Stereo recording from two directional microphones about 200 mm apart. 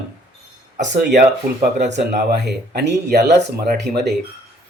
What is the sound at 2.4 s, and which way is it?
Speech, 60° right (ahead or behind).